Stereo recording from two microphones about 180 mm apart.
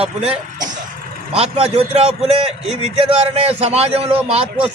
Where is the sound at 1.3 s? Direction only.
35° right (ahead or behind).